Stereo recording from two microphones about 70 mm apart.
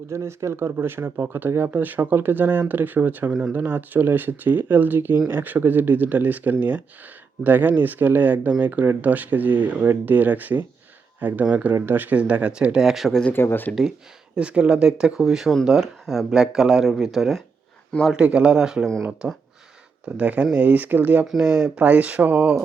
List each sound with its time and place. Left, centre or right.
0.1 s speech: right; by 13.1 s centre
13.3 s speech: left
14.3 s speech: centre
18.1 s speech: centre
19.2 s speech: right
21.2 s speech: centre